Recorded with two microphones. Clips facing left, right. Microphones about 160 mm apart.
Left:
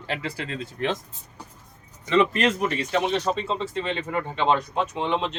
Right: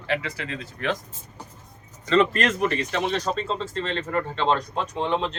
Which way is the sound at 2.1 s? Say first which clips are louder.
Even; 15° left (ahead or behind).